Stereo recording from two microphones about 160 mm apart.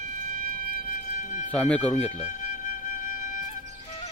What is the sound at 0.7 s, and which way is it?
Music, 55° left (ahead or behind).